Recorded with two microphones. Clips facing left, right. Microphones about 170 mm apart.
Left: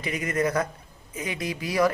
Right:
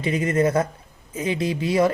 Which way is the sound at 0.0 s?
30° right (ahead or behind).